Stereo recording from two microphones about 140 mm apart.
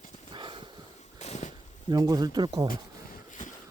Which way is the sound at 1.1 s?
55° left (ahead or behind).